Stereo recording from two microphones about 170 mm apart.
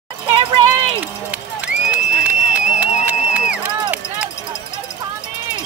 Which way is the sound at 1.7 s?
5° right (ahead or behind).